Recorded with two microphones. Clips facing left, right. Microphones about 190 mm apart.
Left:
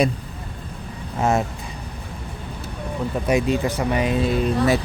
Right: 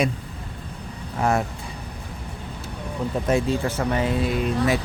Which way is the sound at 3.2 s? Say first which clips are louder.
Left 2 dB; 15° left (ahead or behind).